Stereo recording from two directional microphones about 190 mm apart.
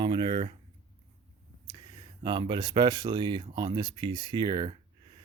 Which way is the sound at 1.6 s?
20° right (ahead or behind).